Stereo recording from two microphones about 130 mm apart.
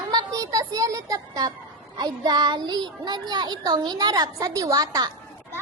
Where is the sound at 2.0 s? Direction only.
30° right (ahead or behind).